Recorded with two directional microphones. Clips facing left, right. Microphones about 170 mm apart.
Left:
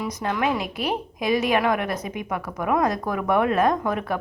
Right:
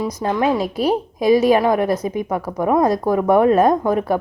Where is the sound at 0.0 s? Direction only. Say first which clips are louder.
Right 6 dB; 30° right (ahead or behind).